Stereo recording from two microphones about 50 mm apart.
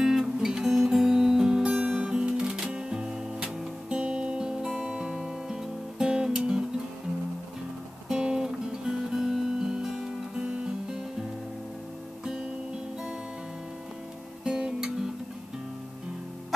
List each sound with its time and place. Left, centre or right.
0.0 s music: centre
8.1 s music: centre
14.4 s music: centre